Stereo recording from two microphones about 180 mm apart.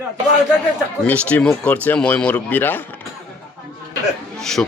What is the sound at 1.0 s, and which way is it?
Speech, 10° left (ahead or behind).